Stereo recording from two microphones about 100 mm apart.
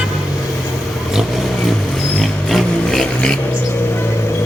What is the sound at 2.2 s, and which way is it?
Music, centre (ahead or behind).